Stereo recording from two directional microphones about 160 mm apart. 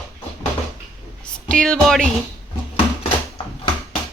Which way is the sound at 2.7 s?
40° left (ahead or behind).